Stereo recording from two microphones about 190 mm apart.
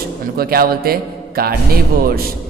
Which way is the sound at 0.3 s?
50° right (ahead or behind).